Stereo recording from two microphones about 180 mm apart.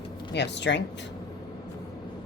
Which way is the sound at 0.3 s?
75° left (ahead or behind).